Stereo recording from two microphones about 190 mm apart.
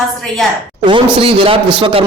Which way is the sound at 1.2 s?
30° right (ahead or behind).